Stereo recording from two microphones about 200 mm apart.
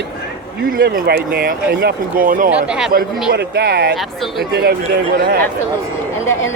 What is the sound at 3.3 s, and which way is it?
Speech, 55° right (ahead or behind).